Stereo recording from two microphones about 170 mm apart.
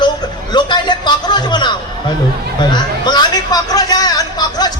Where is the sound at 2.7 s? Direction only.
25° left (ahead or behind).